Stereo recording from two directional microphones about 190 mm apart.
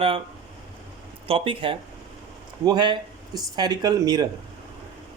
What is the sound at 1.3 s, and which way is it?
Speech, 25° right (ahead or behind).